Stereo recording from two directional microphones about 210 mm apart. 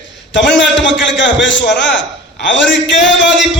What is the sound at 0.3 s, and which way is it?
A man's voice, 60° left (ahead or behind).